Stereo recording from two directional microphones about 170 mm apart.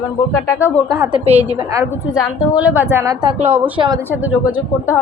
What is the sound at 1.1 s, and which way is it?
Speech, 35° right (ahead or behind).